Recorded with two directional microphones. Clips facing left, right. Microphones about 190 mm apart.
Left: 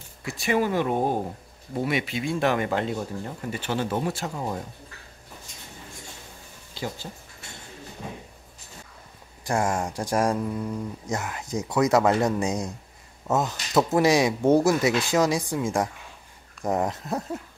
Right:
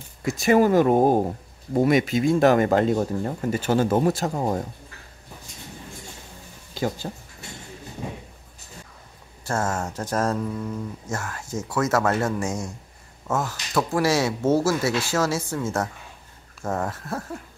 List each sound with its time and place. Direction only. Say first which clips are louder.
0.2 s speech: right 6 dB; 45° right (ahead or behind)
6.8 s a sound: right 6 dB; 45° right (ahead or behind)
9.4 s speech: left 1 dB; 15° left (ahead or behind)